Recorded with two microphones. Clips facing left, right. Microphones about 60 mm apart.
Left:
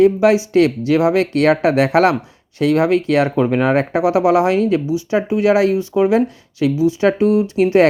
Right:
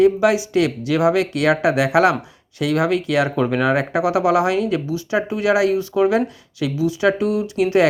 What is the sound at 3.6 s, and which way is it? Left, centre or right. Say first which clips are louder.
Speech: left 3 dB; left.